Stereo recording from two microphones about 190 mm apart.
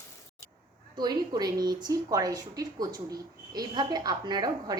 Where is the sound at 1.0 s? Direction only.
20° right (ahead or behind).